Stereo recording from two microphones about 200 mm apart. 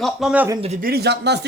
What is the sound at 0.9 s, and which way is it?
Speech, 55° right (ahead or behind).